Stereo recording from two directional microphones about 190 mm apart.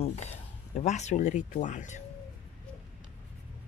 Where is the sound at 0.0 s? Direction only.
35° left (ahead or behind).